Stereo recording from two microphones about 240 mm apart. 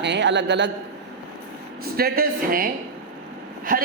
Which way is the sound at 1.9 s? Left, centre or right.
Right.